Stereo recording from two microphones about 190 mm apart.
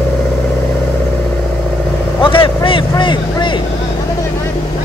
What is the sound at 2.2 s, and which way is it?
Vehicle, 25° left (ahead or behind).